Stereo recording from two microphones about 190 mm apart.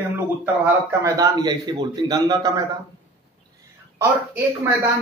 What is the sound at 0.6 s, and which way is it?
Speech, 15° right (ahead or behind).